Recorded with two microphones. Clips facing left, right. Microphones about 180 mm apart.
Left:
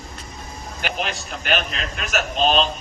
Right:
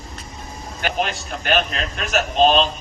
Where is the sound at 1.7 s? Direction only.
40° right (ahead or behind).